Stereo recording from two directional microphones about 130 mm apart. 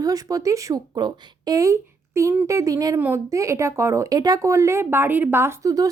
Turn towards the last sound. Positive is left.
turn(degrees=-25)  # may be behind; listen again after turning